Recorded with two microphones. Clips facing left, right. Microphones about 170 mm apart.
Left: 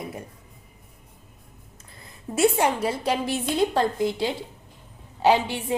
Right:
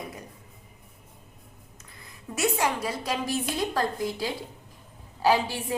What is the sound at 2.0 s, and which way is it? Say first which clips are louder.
A woman's voice: left 8 dB; 30° left (ahead or behind).